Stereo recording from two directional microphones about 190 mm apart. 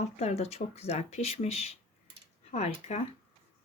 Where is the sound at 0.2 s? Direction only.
35° left (ahead or behind).